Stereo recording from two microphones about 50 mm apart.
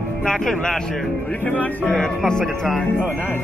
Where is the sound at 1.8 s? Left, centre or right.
Centre.